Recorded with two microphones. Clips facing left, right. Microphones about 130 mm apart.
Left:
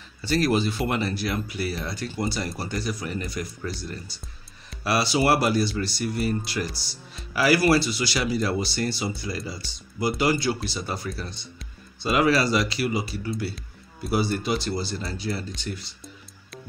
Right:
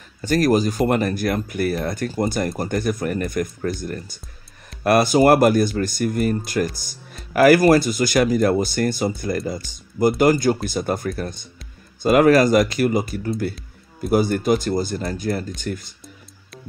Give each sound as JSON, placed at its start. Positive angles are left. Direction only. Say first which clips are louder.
{"t": 0.2, "sound": "speech", "louder": "right 5 dB", "side_deg": -45}